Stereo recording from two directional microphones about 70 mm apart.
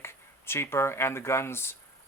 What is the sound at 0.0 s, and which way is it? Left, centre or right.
Speech, left.